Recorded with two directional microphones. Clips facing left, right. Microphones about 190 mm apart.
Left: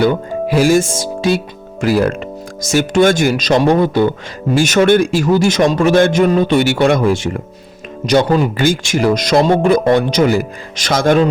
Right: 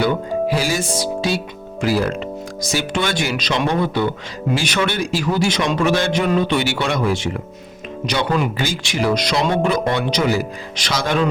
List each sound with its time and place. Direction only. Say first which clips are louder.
0.5 s a man's voice: left 8 dB; 50° left (ahead or behind)
8.5 s a man's voice: left 7 dB; 50° left (ahead or behind)